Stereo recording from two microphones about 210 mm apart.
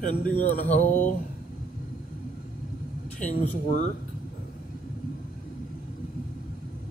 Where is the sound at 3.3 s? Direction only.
35° left (ahead or behind).